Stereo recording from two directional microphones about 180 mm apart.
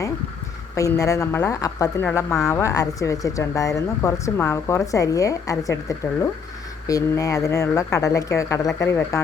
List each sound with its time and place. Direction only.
0.8 s speech: 20° left (ahead or behind)
2.0 s speech: 5° left (ahead or behind)
2.4 s speech: 15° left (ahead or behind)